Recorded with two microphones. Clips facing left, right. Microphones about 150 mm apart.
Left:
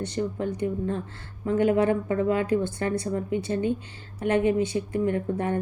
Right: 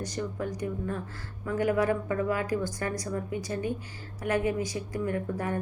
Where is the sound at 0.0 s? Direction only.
25° left (ahead or behind).